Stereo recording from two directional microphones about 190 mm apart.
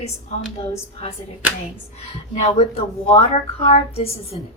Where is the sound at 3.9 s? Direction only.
30° left (ahead or behind).